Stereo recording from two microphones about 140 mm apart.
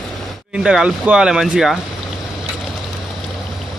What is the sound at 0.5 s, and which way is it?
Speech, 5° right (ahead or behind).